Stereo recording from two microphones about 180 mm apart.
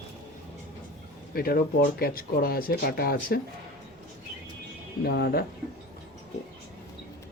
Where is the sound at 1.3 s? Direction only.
55° left (ahead or behind).